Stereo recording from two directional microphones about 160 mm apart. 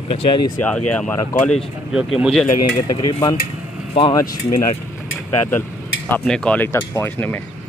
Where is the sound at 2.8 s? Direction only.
25° left (ahead or behind).